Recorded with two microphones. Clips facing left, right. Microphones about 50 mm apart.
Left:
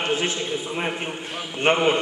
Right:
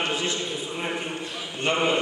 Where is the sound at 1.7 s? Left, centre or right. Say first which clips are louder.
Left 5 dB; left.